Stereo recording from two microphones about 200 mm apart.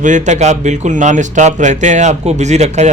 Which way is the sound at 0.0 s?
35° right (ahead or behind).